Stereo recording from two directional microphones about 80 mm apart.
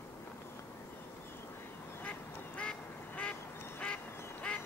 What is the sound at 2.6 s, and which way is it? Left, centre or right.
Duck, centre.